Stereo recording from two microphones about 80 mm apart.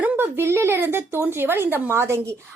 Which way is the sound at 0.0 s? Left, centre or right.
Right.